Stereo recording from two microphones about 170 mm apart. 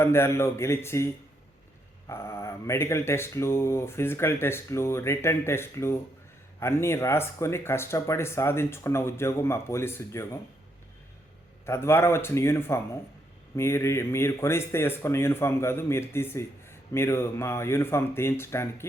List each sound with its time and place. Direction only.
0.0 s speech: 15° left (ahead or behind)
11.6 s speech: 15° left (ahead or behind)